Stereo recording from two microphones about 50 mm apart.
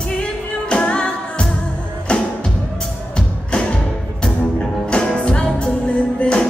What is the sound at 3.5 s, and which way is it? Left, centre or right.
Music, left.